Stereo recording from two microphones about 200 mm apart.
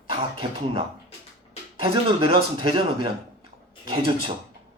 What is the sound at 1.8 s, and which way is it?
Speech, 25° right (ahead or behind).